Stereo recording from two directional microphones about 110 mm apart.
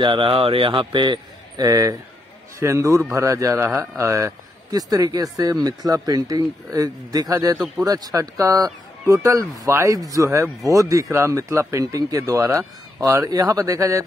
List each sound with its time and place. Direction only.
0.0 s speech: 50° right (ahead or behind)
2.6 s speech: 25° right (ahead or behind)